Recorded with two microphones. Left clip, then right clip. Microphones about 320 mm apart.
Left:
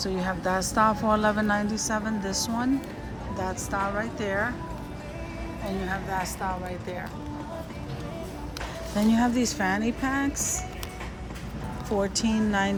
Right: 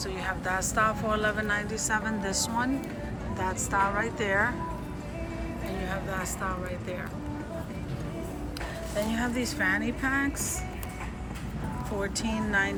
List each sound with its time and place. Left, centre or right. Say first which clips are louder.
0.0 s speech: left 3 dB; centre
9.1 s speech: left 4 dB; centre
12.1 s speech: left 2 dB; centre